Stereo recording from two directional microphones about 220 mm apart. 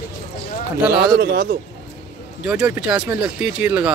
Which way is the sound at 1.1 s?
45° right (ahead or behind).